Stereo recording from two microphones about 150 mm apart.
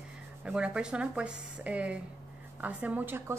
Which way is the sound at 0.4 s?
5° right (ahead or behind).